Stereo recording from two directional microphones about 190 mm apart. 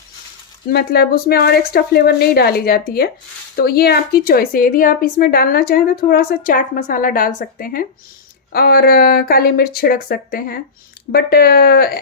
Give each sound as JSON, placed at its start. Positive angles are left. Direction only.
{"t": 0.7, "sound": "a woman's voice", "side_deg": 55}